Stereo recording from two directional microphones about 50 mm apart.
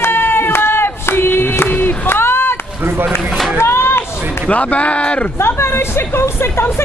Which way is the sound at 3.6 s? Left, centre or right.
Left.